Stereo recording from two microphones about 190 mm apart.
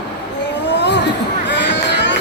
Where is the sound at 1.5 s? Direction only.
70° left (ahead or behind).